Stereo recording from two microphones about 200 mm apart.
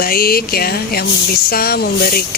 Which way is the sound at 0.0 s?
50° left (ahead or behind).